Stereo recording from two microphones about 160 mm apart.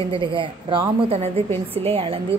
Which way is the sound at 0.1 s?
30° right (ahead or behind).